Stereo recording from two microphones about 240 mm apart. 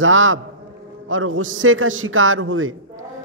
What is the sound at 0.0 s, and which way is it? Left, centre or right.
A man's voice, right.